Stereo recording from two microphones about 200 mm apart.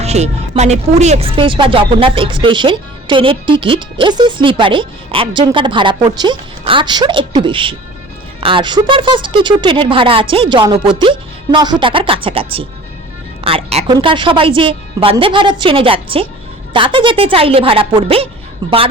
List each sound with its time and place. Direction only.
0.0 s a woman's voice: 30° right (ahead or behind)